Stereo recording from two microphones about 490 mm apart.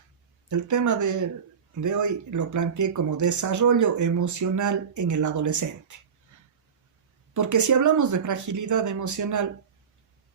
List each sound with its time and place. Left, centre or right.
0.4 s speech: right
7.3 s speech: right